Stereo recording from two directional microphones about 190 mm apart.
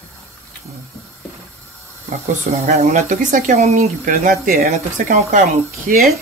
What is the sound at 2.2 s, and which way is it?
Speech, 45° right (ahead or behind).